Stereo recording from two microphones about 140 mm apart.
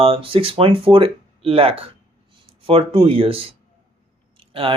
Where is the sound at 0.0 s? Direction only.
40° right (ahead or behind).